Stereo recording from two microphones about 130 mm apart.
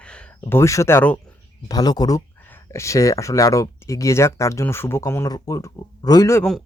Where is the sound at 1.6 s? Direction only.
30° left (ahead or behind).